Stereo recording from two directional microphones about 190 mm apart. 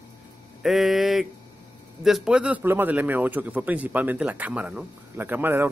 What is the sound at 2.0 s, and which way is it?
A man's voice, 5° right (ahead or behind).